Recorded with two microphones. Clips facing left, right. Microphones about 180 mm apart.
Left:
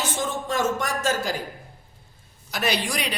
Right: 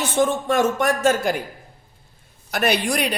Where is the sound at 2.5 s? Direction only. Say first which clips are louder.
Right 5 dB; 55° right (ahead or behind).